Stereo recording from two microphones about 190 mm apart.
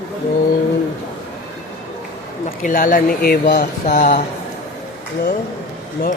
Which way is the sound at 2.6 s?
45° left (ahead or behind).